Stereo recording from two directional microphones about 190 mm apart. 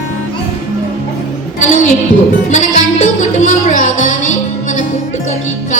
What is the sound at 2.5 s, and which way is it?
Music, 40° left (ahead or behind).